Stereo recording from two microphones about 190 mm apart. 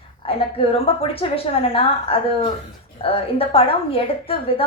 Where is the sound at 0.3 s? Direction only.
30° left (ahead or behind).